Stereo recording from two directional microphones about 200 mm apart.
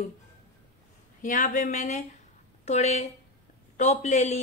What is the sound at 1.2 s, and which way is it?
Speech, 40° left (ahead or behind).